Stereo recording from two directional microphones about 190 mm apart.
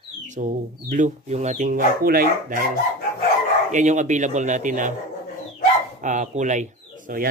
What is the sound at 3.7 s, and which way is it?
Speech, 40° right (ahead or behind).